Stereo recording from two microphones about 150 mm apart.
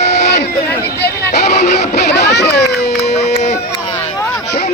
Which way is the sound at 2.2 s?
90° left.